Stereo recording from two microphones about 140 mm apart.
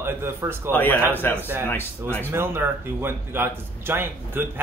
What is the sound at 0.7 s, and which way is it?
Speech, 15° left (ahead or behind).